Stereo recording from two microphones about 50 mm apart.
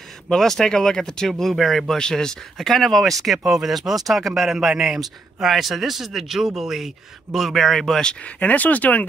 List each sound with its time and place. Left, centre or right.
0.3 s a man's voice: centre
8.2 s speech: left